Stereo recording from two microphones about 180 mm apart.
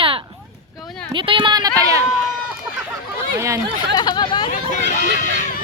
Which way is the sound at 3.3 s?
15° right (ahead or behind).